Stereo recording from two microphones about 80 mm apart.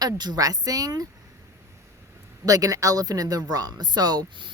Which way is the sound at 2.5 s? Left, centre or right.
Right.